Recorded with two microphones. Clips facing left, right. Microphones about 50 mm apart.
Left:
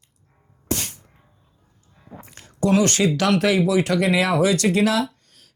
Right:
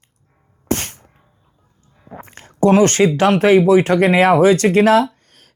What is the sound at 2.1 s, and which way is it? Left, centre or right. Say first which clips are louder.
Speech: right 6 dB; right.